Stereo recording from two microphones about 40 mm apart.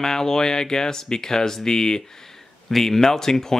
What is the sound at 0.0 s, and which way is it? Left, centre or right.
Speech, centre.